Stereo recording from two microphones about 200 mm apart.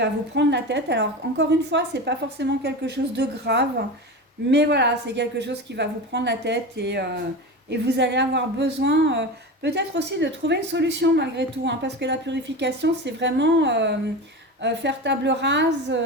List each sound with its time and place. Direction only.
0.0 s speech: 60° right (ahead or behind)